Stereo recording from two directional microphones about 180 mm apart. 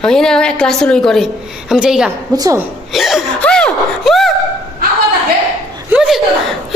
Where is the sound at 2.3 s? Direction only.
20° right (ahead or behind).